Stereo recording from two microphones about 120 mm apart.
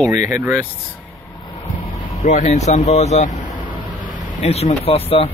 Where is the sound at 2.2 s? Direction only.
80° left.